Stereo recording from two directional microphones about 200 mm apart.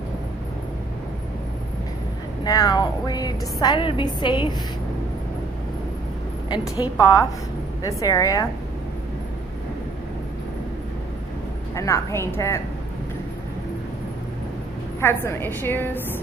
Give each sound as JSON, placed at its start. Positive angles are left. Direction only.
{"t": 2.4, "sound": "a woman's voice", "side_deg": 20}
{"t": 6.5, "sound": "a woman's voice", "side_deg": 20}
{"t": 11.7, "sound": "a woman's voice", "side_deg": 15}
{"t": 15.0, "sound": "a woman's voice", "side_deg": 10}